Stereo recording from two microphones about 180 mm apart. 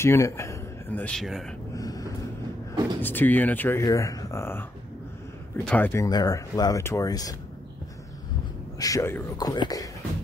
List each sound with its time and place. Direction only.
0.0 s speech: 15° left (ahead or behind)
1.8 s vehicle: 20° left (ahead or behind)
3.0 s speech: 10° left (ahead or behind)
5.7 s speech: 10° left (ahead or behind)
6.0 s speech: 20° left (ahead or behind)
8.7 s speech: 20° left (ahead or behind)